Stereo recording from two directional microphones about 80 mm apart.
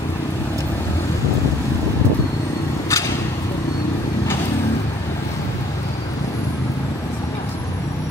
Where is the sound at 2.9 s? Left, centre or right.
Left.